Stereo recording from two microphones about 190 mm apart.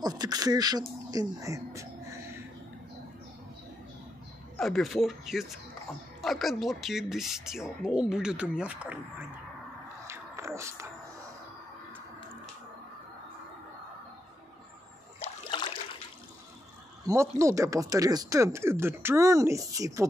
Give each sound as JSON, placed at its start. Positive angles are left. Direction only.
{"t": 0.0, "sound": "speech", "side_deg": -20}
{"t": 4.6, "sound": "speech", "side_deg": 0}
{"t": 10.0, "sound": "music", "side_deg": -15}
{"t": 15.1, "sound": "a sound", "side_deg": 30}
{"t": 17.0, "sound": "speech", "side_deg": -15}